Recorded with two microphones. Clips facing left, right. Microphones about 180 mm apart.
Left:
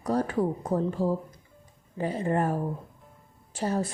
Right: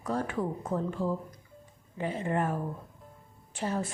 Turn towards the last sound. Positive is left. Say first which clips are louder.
# left 4 dB
turn(degrees=40)  # may be behind; listen again after turning